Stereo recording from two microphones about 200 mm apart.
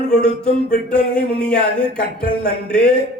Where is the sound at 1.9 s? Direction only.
45° left (ahead or behind).